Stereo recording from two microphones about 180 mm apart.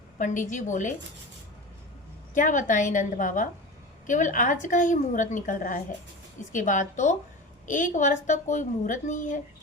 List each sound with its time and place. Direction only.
0.2 s a woman's voice: 45° left (ahead or behind)
2.3 s a woman's voice: 45° left (ahead or behind)